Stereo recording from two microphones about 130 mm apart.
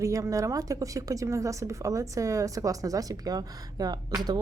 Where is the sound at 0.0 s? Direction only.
25° right (ahead or behind).